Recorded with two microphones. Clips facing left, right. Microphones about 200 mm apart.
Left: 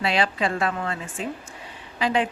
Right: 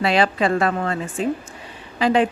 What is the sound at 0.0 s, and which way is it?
Speech, 50° right (ahead or behind).